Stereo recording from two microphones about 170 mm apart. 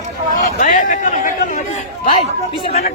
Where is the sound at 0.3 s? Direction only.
50° left (ahead or behind).